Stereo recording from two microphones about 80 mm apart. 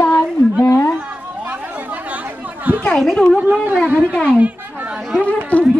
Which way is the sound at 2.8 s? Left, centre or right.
Centre.